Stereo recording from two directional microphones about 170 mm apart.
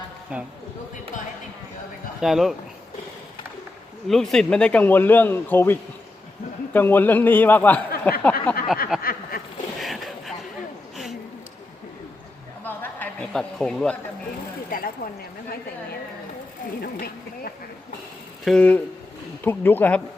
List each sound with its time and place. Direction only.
0.3 s speech: 10° right (ahead or behind)
2.2 s speech: centre (ahead or behind)
4.1 s speech: 5° left (ahead or behind)
8.9 s speech: 5° right (ahead or behind)
9.8 s a sound: centre (ahead or behind)
12.6 s a sound: 10° left (ahead or behind)
14.7 s speech: 60° left (ahead or behind)
16.8 s speech: 60° left (ahead or behind)
18.4 s speech: 5° left (ahead or behind)